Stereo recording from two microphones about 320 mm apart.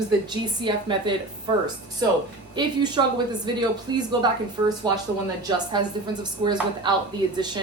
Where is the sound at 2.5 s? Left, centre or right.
Centre.